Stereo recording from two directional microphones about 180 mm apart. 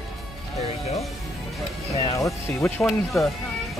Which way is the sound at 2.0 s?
15° left (ahead or behind).